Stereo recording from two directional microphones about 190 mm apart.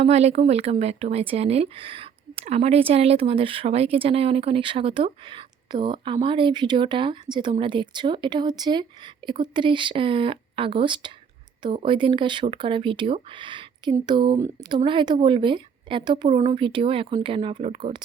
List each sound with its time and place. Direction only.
0.0 s speech: 35° right (ahead or behind)